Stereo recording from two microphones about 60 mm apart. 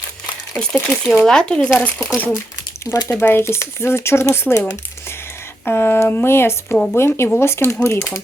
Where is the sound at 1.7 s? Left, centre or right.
Left.